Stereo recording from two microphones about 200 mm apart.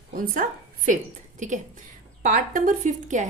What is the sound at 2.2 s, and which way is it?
A woman's voice, 40° right (ahead or behind).